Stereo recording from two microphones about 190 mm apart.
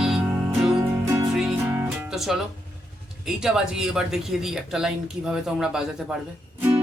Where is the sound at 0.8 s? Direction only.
15° right (ahead or behind).